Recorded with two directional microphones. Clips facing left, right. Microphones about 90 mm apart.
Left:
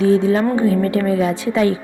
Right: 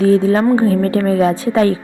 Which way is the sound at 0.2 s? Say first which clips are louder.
Right 3 dB; 40° right (ahead or behind).